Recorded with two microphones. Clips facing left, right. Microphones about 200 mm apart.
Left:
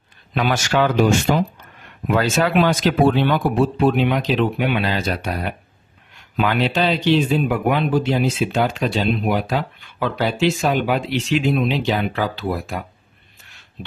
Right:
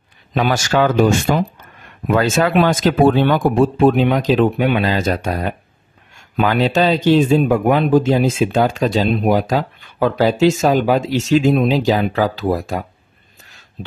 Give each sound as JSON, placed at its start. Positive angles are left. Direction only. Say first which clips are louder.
{"t": 0.3, "sound": "speech", "louder": "right 3 dB", "side_deg": -40}